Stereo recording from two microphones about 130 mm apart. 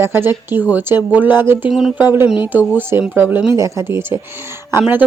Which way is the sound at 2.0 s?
15° right (ahead or behind).